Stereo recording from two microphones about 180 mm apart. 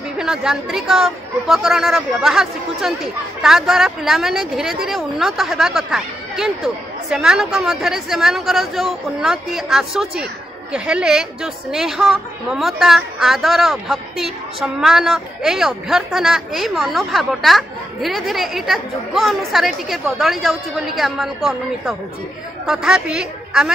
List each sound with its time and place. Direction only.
0.2 s a woman's voice: 5° right (ahead or behind)